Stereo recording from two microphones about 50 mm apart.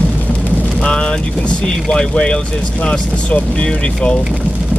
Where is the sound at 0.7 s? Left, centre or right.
Centre.